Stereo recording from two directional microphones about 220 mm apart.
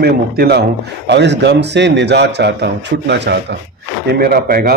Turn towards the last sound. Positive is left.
turn(degrees=-45)  # may be behind; listen again after turning